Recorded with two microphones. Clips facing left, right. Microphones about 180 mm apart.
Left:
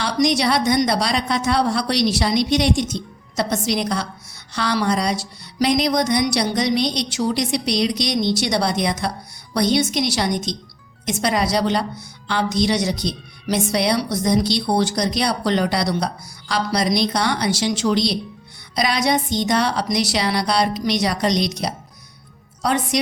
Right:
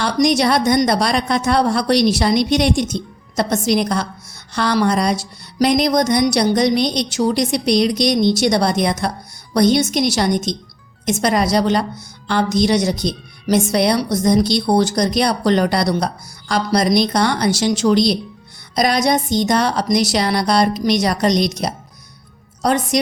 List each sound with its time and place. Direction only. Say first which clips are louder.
0.0 s a woman's voice: right 3 dB; 50° right (ahead or behind)